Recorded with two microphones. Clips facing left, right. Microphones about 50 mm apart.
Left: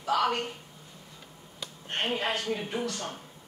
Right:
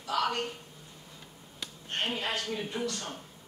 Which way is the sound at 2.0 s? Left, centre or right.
Left.